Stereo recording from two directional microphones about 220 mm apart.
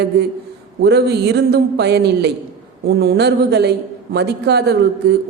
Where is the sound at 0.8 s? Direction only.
50° right (ahead or behind).